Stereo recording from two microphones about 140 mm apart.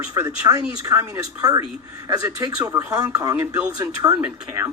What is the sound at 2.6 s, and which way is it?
Speech, 25° right (ahead or behind).